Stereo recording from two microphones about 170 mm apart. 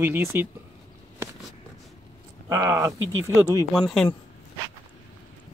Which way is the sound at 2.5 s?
15° right (ahead or behind).